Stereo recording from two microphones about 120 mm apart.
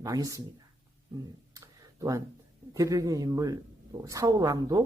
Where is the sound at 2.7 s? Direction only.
30° right (ahead or behind).